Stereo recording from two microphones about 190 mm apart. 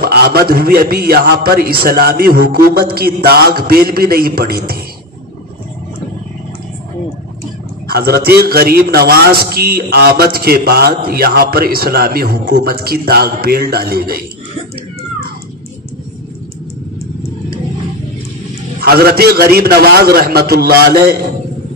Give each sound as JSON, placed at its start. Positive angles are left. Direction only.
{"t": 0.0, "sound": "a man's voice", "side_deg": -55}
{"t": 7.9, "sound": "a man's voice", "side_deg": -55}
{"t": 18.8, "sound": "a man's voice", "side_deg": -55}